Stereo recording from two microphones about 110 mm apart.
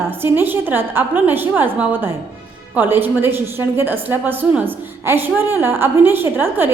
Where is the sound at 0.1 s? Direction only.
20° right (ahead or behind).